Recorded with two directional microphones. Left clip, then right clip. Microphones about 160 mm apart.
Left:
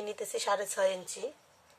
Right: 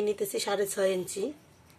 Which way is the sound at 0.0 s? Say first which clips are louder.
Right 5 dB; 15° right (ahead or behind).